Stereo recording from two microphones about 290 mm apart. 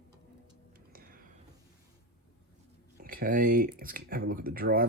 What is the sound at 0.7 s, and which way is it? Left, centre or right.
Music, right.